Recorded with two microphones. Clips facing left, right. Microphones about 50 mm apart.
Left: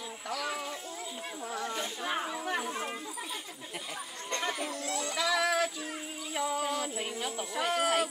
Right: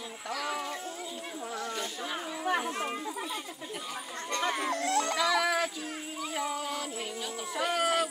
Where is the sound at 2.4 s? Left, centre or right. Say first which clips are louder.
Right 4 dB; centre.